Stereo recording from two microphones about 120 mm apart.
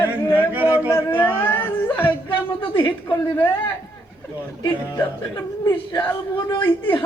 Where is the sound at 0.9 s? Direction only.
20° left (ahead or behind).